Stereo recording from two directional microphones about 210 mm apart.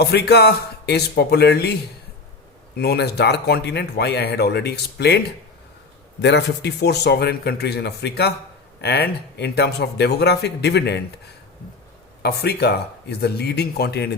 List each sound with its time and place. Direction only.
0.0 s speech: 50° left (ahead or behind)
2.7 s speech: 50° left (ahead or behind)
6.2 s speech: 55° left (ahead or behind)
12.2 s speech: 50° left (ahead or behind)